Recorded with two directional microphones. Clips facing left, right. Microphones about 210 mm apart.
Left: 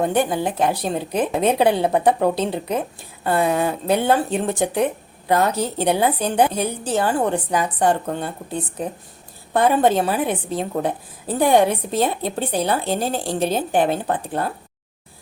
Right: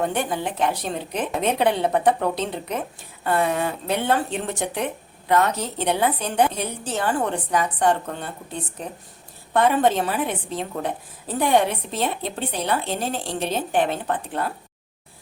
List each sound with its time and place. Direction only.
0.1 s a woman's voice: 35° left (ahead or behind)
9.5 s a woman's voice: 35° left (ahead or behind)